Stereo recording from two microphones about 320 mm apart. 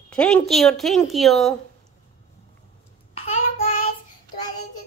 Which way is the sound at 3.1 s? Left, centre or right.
Centre.